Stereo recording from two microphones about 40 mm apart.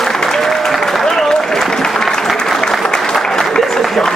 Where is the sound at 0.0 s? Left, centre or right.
Centre.